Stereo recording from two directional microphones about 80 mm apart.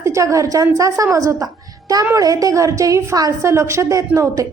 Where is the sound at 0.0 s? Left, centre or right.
Right.